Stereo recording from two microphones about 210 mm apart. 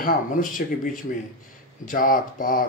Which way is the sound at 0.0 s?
40° left (ahead or behind).